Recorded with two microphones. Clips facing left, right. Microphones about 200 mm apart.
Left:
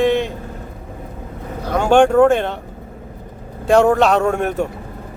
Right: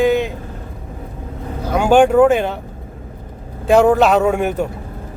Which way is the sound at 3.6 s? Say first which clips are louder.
Right 1 dB; centre (ahead or behind).